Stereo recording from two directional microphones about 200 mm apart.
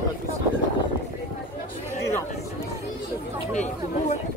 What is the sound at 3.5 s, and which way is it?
Speech, 35° left (ahead or behind).